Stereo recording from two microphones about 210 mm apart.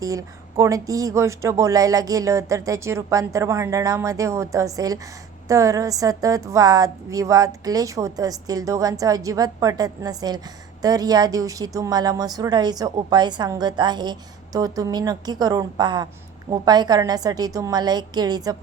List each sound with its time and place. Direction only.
0.0 s a woman's voice: 15° right (ahead or behind)